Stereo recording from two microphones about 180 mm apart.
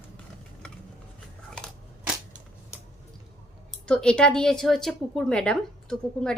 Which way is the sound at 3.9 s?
5° left (ahead or behind).